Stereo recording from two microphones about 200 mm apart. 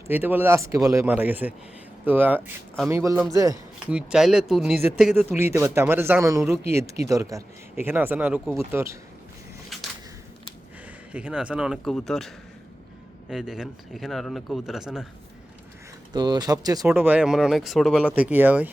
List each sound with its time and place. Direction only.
0.1 s speech: 10° right (ahead or behind)
3.8 s speech: 5° right (ahead or behind)
5.3 s speech: 10° right (ahead or behind)
11.1 s speech: 5° right (ahead or behind)
13.3 s speech: 5° right (ahead or behind)
16.1 s speech: 20° right (ahead or behind)
16.8 s speech: 10° right (ahead or behind)